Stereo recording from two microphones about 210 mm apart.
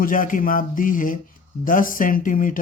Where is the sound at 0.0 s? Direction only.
40° left (ahead or behind).